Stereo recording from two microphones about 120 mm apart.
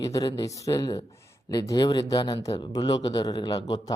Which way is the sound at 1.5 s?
35° left (ahead or behind).